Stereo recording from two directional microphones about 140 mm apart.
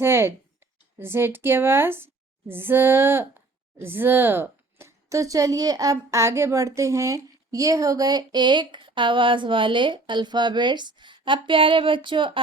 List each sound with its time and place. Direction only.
0.0 s speech: 15° right (ahead or behind); by 12.4 s 35° right (ahead or behind)